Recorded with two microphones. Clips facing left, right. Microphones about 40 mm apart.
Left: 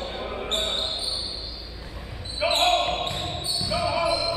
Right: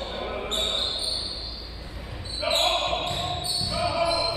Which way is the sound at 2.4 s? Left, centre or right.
Left.